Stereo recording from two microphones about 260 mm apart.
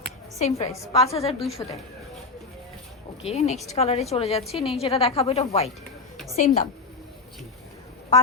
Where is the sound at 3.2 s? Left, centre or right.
Left.